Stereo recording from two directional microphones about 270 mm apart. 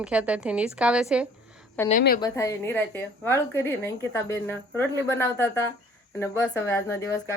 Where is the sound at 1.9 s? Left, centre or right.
Left.